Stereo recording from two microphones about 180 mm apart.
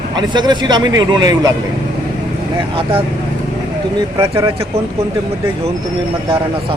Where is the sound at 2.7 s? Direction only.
30° right (ahead or behind).